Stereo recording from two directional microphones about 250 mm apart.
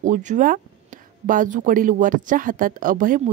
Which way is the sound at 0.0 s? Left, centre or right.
Right.